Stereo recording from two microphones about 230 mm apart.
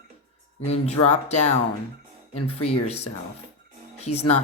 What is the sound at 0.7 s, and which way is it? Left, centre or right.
Speech, left.